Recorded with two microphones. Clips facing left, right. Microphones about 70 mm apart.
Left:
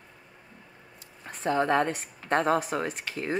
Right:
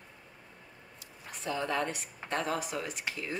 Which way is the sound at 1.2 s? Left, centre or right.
Left.